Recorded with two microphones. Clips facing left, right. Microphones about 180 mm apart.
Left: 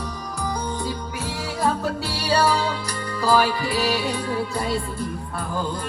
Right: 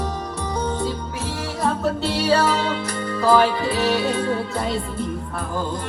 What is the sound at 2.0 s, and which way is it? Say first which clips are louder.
Music: right 2 dB; 25° right (ahead or behind).